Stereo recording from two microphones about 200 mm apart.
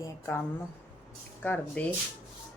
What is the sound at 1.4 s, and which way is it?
Speech, 10° left (ahead or behind).